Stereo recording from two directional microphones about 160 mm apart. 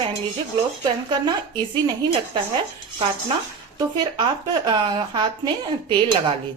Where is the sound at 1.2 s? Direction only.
25° right (ahead or behind).